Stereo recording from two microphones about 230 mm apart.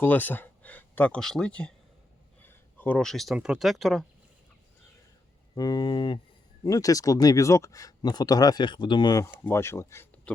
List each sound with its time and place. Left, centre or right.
0.0 s speech: centre
5.5 s speech: centre